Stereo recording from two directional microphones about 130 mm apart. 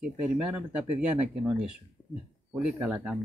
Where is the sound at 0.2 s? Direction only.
10° right (ahead or behind).